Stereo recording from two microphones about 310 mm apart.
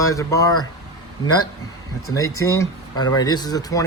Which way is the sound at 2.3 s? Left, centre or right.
Centre.